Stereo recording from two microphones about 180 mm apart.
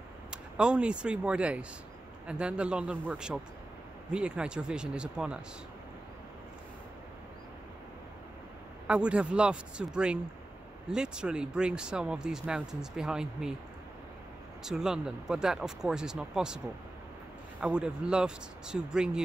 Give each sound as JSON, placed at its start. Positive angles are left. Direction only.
{"t": 0.3, "sound": "speech", "side_deg": -5}
{"t": 8.8, "sound": "speech", "side_deg": -5}
{"t": 14.6, "sound": "speech", "side_deg": -5}